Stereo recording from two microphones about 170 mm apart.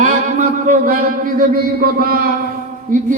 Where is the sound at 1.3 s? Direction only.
60° right (ahead or behind).